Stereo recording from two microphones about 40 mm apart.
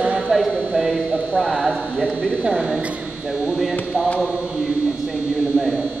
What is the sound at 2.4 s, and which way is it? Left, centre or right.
Speech, right.